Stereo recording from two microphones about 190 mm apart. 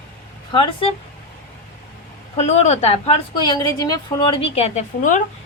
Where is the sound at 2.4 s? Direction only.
35° left (ahead or behind).